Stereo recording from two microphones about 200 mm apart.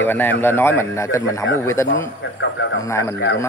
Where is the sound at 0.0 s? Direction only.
10° left (ahead or behind).